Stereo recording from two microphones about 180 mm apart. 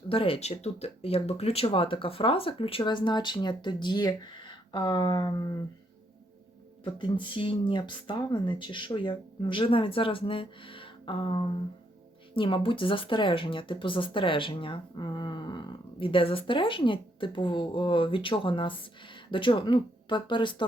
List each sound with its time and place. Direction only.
0.1 s speech: 30° left (ahead or behind)
7.0 s speech: 30° left (ahead or behind)